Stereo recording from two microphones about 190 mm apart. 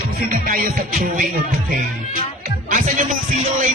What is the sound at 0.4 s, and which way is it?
Music, 50° right (ahead or behind).